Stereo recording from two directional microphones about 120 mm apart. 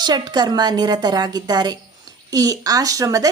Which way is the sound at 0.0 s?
35° right (ahead or behind).